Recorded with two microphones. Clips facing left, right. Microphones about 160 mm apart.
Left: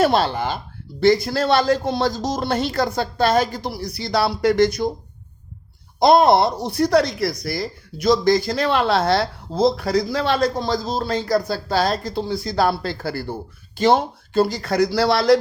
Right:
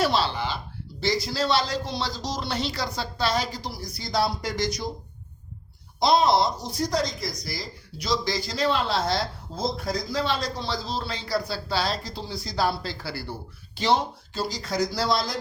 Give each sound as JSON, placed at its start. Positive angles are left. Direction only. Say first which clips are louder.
{"t": 0.0, "sound": "speech", "louder": "left 6 dB", "side_deg": 50}
{"t": 6.0, "sound": "speech", "louder": "left 6 dB", "side_deg": 55}